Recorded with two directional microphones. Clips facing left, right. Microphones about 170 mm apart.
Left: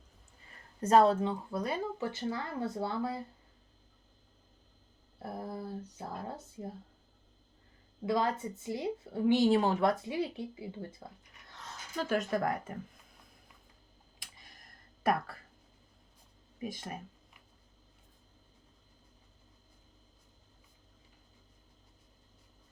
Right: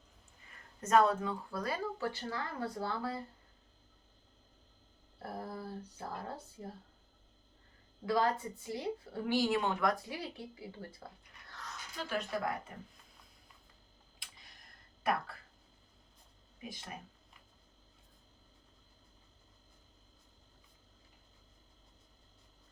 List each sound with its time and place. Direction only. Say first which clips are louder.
0.8 s speech: left 4 dB; 30° left (ahead or behind)
5.2 s speech: left 2 dB; 20° left (ahead or behind)
8.0 s speech: left 1 dB; 20° left (ahead or behind)
10.0 s speech: left 8 dB; 20° left (ahead or behind)
11.5 s a sound: even; 25° left (ahead or behind)
11.9 s speech: left 6 dB; 45° left (ahead or behind)
16.6 s speech: left 8 dB; 45° left (ahead or behind)